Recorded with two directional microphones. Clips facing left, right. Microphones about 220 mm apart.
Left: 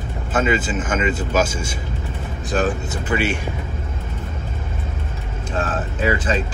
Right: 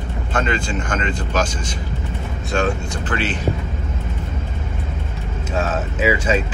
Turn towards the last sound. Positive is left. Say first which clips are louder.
# right 2 dB
turn(degrees=-10)  # may be behind; listen again after turning